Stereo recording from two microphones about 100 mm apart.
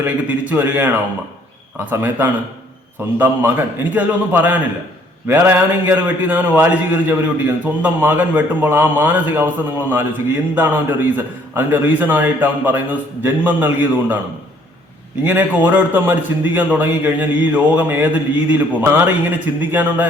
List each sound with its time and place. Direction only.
0.0 s a man's voice: 15° right (ahead or behind)
10.5 s a man's voice: 20° right (ahead or behind)
15.2 s a man's voice: 20° right (ahead or behind)